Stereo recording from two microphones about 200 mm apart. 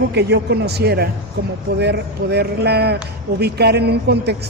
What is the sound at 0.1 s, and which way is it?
Speech, 55° right (ahead or behind).